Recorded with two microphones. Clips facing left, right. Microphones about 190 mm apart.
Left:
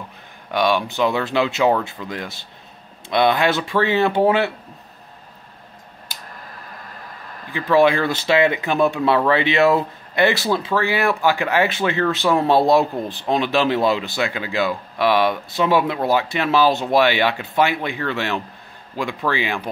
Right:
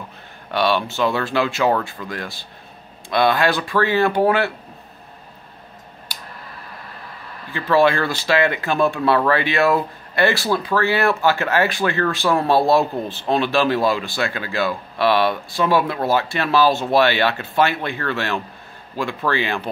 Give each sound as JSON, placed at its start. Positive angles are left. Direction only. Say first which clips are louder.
{"t": 0.5, "sound": "speech", "louder": "even", "side_deg": 15}
{"t": 7.5, "sound": "speech", "louder": "left 1 dB", "side_deg": 15}